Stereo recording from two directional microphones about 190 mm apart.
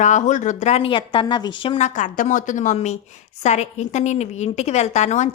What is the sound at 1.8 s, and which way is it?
A woman's voice, 40° left (ahead or behind).